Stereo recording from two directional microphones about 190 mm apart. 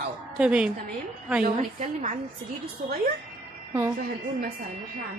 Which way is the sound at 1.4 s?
40° right (ahead or behind).